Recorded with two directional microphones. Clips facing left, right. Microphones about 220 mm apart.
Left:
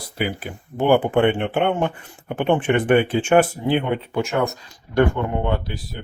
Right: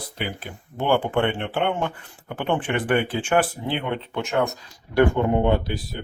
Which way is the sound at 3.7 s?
10° left (ahead or behind).